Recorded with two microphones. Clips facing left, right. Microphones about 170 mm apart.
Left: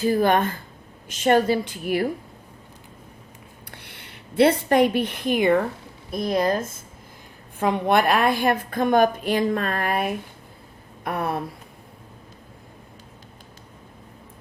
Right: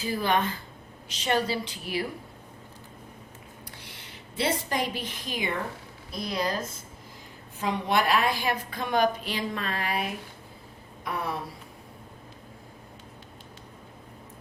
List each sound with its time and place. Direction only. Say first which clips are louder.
0.0 s a woman's voice: left 7 dB; 50° left (ahead or behind)
3.7 s a woman's voice: left 2 dB; 60° left (ahead or behind)
11.0 s a sound: left 6 dB; 55° left (ahead or behind)